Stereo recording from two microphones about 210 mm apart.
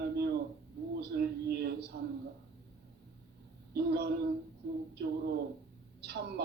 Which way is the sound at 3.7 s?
50° right (ahead or behind).